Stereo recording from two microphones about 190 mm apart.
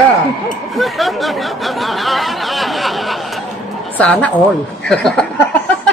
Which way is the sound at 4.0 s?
5° left (ahead or behind).